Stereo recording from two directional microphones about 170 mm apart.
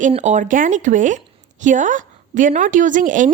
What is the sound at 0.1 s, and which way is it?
A woman's voice, 45° right (ahead or behind).